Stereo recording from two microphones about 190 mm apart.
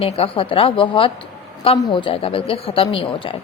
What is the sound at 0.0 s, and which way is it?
A woman's voice, 30° left (ahead or behind).